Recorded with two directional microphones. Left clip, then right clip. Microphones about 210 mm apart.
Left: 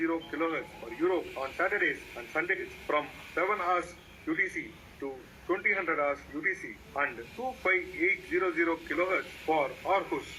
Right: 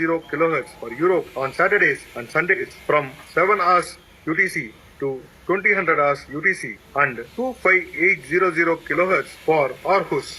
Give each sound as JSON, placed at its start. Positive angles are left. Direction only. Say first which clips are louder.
{"t": 0.0, "sound": "speech", "louder": "right 11 dB", "side_deg": -45}